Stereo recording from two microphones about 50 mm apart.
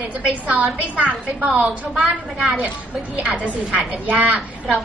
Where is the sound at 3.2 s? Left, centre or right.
Right.